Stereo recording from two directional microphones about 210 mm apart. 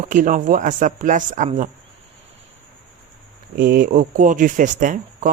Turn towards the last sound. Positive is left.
turn(degrees=-35)  # may be behind; listen again after turning